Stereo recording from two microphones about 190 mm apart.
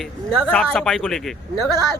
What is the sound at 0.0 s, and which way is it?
Speech, 5° left (ahead or behind).